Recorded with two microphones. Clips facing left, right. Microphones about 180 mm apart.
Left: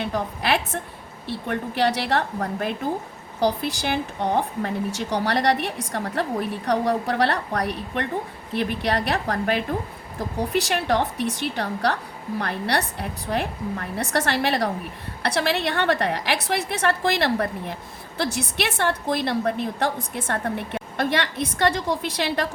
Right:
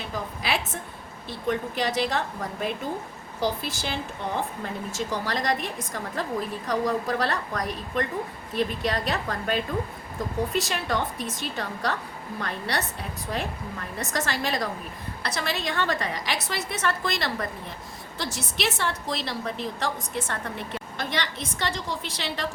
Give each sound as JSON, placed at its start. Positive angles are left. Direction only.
{"t": 0.0, "sound": "a woman's voice", "side_deg": 65}